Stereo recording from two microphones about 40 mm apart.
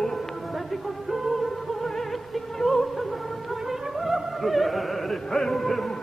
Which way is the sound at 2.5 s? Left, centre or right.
Centre.